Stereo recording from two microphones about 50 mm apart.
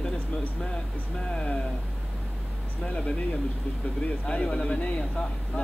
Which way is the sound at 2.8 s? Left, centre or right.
Left.